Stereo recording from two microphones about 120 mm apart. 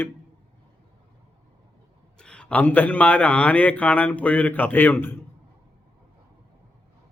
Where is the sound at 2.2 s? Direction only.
10° left (ahead or behind).